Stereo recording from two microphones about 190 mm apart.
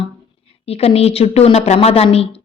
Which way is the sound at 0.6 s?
30° left (ahead or behind).